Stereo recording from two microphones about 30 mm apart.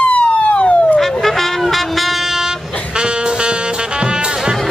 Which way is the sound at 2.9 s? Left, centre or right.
Right.